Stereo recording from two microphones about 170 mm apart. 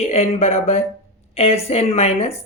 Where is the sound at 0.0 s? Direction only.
40° left (ahead or behind).